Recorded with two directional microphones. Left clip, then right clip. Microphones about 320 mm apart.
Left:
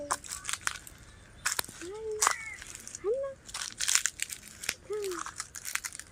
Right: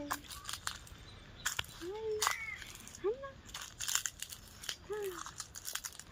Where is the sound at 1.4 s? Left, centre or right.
Left.